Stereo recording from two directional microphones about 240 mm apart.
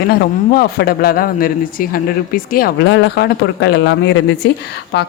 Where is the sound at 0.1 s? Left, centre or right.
Left.